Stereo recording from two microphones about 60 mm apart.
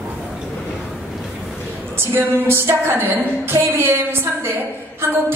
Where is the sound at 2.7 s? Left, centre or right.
Right.